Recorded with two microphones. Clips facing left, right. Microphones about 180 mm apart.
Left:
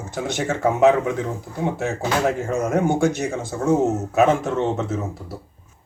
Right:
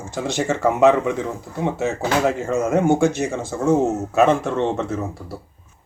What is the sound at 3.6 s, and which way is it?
Speech, centre (ahead or behind).